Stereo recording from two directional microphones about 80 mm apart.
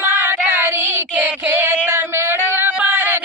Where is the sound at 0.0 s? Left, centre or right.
Right.